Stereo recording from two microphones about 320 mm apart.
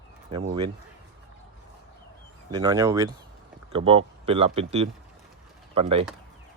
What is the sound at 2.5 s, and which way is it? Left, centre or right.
Speech, centre.